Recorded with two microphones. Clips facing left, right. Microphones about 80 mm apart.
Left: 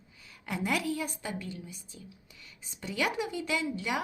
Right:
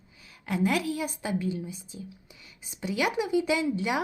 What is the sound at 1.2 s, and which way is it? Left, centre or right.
A woman's voice, centre.